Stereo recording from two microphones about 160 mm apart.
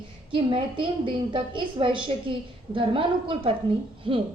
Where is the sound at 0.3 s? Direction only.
30° right (ahead or behind).